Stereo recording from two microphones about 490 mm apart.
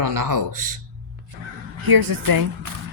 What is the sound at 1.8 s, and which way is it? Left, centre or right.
Speech, right.